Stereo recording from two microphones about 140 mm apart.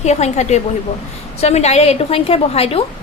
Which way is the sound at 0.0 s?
55° left (ahead or behind).